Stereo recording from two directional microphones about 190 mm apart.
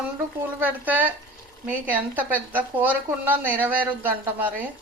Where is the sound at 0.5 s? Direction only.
10° right (ahead or behind).